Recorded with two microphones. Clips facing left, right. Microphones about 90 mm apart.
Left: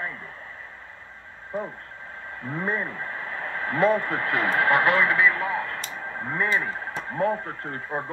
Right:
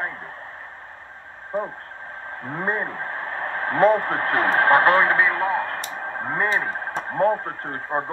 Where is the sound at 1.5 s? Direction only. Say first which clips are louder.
Right 4 dB; 45° right (ahead or behind).